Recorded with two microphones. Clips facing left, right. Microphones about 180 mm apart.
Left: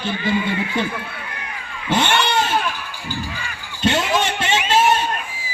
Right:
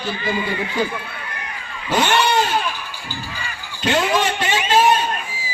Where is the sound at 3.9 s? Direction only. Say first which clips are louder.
Right 1 dB; 25° left (ahead or behind).